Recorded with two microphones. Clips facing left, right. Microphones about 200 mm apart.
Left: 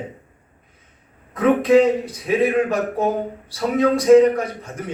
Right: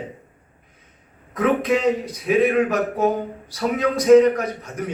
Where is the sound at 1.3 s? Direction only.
30° left (ahead or behind).